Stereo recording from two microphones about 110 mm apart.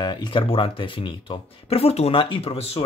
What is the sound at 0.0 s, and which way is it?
Speech, 40° left (ahead or behind).